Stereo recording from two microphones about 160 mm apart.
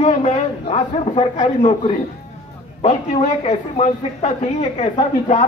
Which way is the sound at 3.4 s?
45° left (ahead or behind).